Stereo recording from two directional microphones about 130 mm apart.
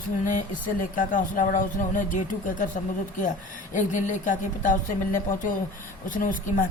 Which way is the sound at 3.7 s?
75° left (ahead or behind).